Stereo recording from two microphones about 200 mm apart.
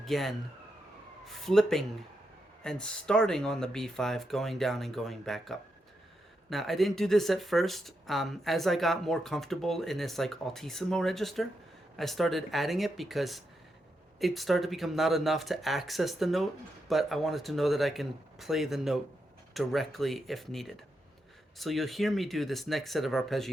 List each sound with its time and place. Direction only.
0.0 s speech: centre (ahead or behind)